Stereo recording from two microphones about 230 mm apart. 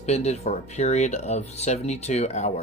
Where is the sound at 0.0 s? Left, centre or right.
Left.